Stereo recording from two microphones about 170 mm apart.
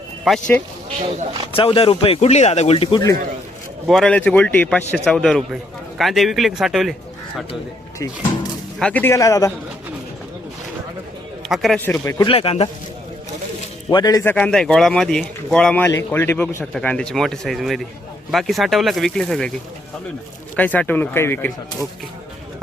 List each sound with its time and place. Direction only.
0.3 s a man's voice: 5° left (ahead or behind)
1.5 s a man's voice: 35° left (ahead or behind)
3.8 s a man's voice: 5° left (ahead or behind)
8.8 s speech: 10° left (ahead or behind)
11.4 s a man's voice: centre (ahead or behind)
12.1 s a man's voice: 30° left (ahead or behind)
13.9 s a man's voice: 20° left (ahead or behind)
14.3 s a man's voice: 5° left (ahead or behind)
20.6 s speech: 10° left (ahead or behind)